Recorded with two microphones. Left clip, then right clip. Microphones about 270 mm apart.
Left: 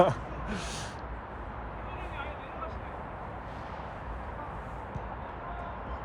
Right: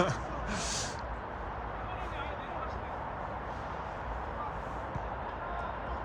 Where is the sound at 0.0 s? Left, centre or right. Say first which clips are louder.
Left 6 dB; centre.